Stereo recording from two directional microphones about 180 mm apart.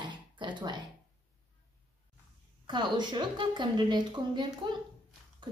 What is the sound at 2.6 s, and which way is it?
Speech, 25° right (ahead or behind).